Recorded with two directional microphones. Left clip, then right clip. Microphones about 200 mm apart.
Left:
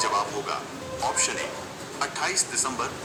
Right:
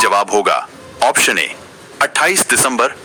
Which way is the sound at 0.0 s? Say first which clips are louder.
Right 14 dB; 60° right (ahead or behind).